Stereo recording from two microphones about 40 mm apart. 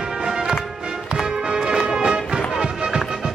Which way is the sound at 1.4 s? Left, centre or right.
Right.